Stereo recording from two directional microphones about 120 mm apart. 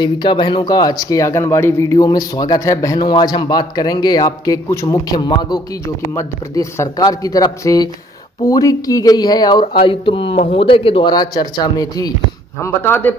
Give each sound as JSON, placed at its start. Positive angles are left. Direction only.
{"t": 0.0, "sound": "speech", "side_deg": 40}
{"t": 6.1, "sound": "speech", "side_deg": 25}
{"t": 10.3, "sound": "speech", "side_deg": 70}
{"t": 10.6, "sound": "speech", "side_deg": 50}
{"t": 11.1, "sound": "speech", "side_deg": 35}
{"t": 12.5, "sound": "a man's voice", "side_deg": 20}